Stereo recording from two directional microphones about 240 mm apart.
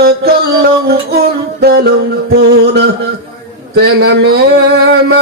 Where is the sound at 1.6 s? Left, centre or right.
Right.